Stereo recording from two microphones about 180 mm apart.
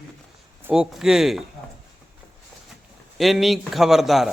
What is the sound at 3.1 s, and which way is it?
Speech, centre (ahead or behind).